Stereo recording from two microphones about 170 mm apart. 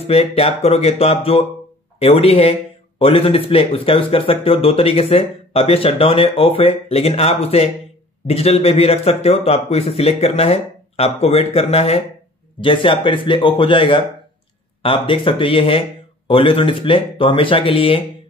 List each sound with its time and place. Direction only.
0.0 s speech: 35° left (ahead or behind)